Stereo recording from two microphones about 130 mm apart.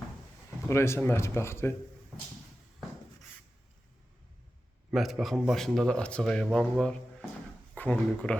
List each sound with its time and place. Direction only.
0.7 s speech: 20° left (ahead or behind)
4.9 s speech: centre (ahead or behind)